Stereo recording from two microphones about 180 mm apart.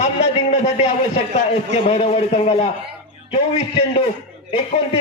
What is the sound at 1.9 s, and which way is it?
Speech, 35° left (ahead or behind).